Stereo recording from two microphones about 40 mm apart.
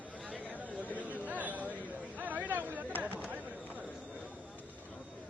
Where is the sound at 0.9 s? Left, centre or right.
Right.